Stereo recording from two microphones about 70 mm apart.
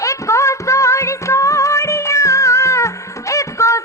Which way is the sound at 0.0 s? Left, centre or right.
Left.